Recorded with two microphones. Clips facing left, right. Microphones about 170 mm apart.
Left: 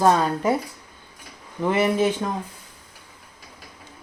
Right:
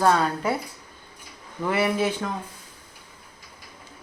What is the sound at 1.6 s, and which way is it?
Speech, 20° left (ahead or behind).